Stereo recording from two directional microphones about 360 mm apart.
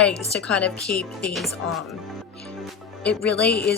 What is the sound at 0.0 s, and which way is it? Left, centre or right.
Speech, centre.